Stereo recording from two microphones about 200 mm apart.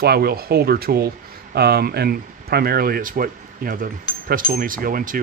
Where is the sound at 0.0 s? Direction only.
50° right (ahead or behind).